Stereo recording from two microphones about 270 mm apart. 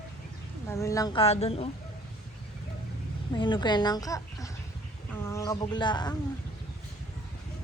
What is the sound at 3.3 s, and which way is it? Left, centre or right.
Speech, centre.